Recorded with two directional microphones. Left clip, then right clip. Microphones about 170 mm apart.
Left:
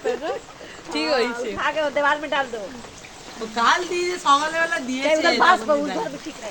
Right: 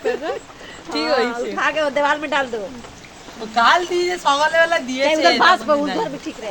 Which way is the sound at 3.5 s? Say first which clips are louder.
Right 5 dB; 60° right (ahead or behind).